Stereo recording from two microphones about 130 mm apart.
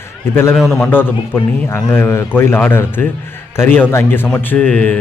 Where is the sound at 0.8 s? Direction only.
15° left (ahead or behind).